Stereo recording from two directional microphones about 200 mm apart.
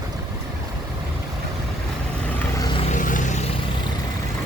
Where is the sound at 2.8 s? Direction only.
40° left (ahead or behind).